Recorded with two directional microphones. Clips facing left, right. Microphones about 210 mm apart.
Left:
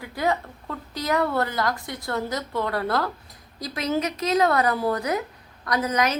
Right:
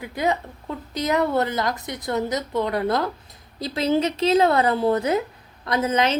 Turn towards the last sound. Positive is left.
turn(degrees=-25)  # may be behind; listen again after turning